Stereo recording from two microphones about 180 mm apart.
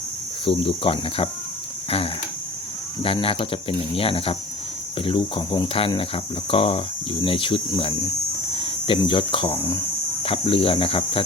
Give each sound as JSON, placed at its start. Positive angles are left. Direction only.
{"t": 0.4, "sound": "speech", "side_deg": 30}
{"t": 3.0, "sound": "speech", "side_deg": 30}